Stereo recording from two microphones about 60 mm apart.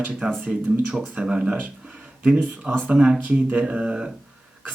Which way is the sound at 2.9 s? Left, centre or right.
Centre.